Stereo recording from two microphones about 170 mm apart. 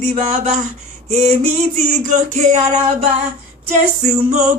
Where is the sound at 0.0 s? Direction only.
40° right (ahead or behind).